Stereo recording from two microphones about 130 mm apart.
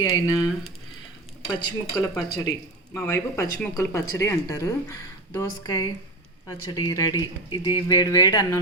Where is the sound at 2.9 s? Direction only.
25° left (ahead or behind).